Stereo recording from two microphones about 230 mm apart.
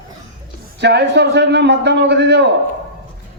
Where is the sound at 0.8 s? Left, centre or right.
Right.